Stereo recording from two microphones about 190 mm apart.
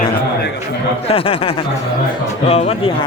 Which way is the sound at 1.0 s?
30° left (ahead or behind).